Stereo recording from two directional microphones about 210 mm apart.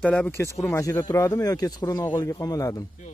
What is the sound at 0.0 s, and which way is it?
Speech, 5° left (ahead or behind).